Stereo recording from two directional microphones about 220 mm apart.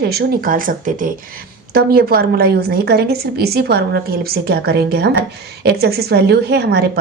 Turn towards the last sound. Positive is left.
turn(degrees=-45)  # may be behind; listen again after turning